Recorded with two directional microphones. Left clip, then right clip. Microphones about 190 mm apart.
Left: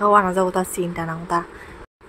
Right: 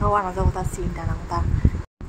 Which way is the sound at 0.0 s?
20° left (ahead or behind).